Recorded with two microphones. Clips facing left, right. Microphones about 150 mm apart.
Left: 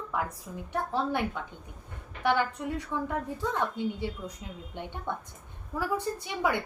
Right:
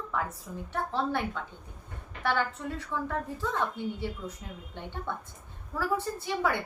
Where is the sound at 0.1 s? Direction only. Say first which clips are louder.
Left 1 dB; 15° left (ahead or behind).